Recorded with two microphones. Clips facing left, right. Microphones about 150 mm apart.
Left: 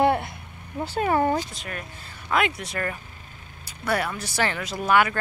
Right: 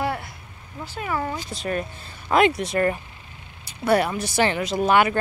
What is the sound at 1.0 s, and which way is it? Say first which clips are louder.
Speech: left 5 dB; 40° left (ahead or behind).